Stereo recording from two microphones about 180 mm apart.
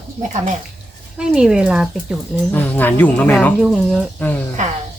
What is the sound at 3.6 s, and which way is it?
Speech, 5° right (ahead or behind).